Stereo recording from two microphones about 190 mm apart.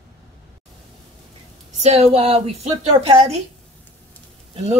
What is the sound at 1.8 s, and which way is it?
Speech, 35° right (ahead or behind).